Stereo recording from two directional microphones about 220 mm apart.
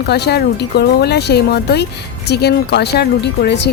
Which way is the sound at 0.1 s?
45° left (ahead or behind).